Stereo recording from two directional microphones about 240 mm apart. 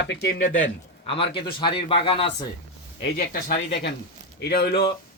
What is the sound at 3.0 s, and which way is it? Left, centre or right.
Speech, left.